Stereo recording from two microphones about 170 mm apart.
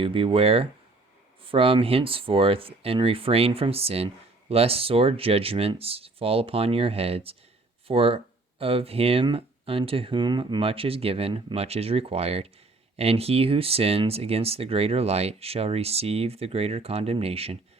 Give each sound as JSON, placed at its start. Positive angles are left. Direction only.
{"t": 0.0, "sound": "speech", "side_deg": -30}